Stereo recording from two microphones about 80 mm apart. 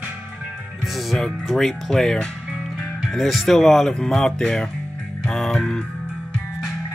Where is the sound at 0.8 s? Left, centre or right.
Centre.